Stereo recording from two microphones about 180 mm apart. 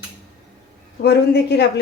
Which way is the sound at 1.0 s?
65° left (ahead or behind).